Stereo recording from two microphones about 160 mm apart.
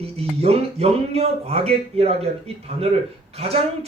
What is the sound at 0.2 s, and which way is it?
Speech, 40° right (ahead or behind).